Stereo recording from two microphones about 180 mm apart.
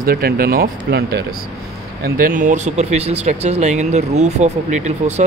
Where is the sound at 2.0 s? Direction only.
50° right (ahead or behind).